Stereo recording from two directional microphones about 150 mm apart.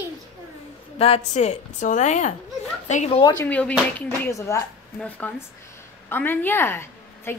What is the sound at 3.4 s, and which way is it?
Speech, 10° left (ahead or behind).